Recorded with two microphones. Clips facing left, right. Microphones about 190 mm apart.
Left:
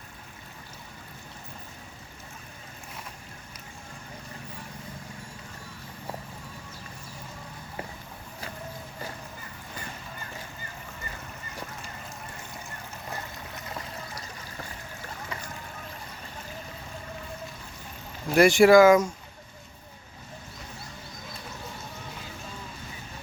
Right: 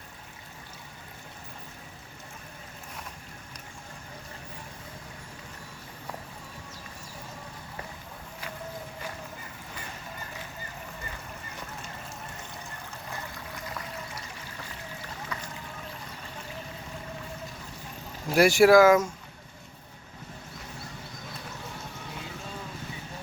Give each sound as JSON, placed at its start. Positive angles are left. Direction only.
{"t": 13.6, "sound": "a sound", "side_deg": 30}
{"t": 15.3, "sound": "music", "side_deg": 25}
{"t": 18.3, "sound": "speech", "side_deg": -5}